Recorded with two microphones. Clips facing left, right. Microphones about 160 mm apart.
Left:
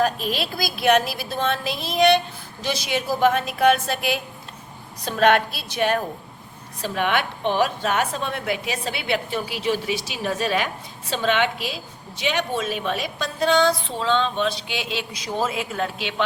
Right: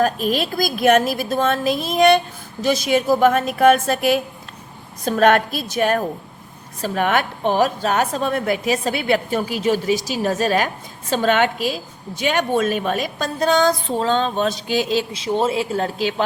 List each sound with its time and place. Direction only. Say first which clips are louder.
0.0 s a woman's voice: right 4 dB; 45° right (ahead or behind)
15.1 s a man's voice: right 6 dB; 30° right (ahead or behind)